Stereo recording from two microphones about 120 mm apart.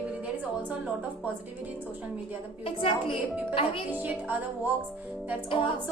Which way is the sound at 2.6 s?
45° left (ahead or behind).